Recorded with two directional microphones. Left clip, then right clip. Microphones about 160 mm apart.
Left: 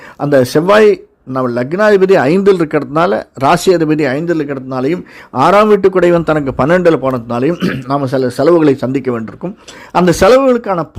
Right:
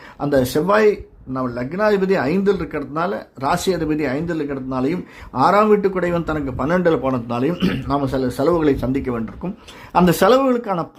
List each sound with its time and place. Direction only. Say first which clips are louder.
0.2 s a man's voice: left 8 dB; 35° left (ahead or behind); by 7.8 s 15° left (ahead or behind)
7.9 s speech: left 8 dB; 30° left (ahead or behind)